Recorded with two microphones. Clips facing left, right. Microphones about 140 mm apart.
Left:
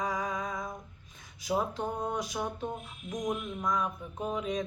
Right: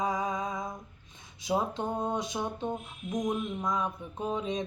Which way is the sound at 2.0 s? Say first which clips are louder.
Right 2 dB; 25° right (ahead or behind).